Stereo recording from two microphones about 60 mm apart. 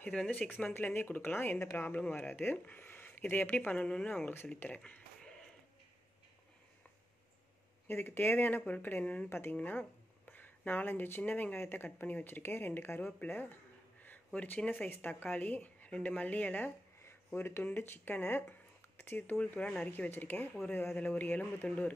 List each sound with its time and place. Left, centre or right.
0.7 s speech: left
1.8 s speech: left
7.9 s speech: left
14.4 s speech: left
17.3 s speech: left
19.3 s speech: left